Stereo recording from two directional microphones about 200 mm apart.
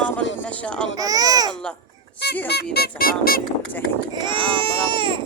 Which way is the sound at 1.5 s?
5° left (ahead or behind).